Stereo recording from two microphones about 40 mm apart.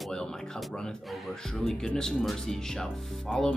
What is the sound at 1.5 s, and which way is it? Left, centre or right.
Speech, centre.